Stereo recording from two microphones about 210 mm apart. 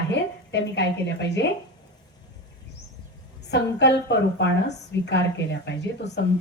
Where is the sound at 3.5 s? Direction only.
55° left (ahead or behind).